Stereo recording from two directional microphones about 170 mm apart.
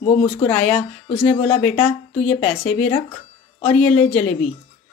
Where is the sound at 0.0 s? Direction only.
40° left (ahead or behind).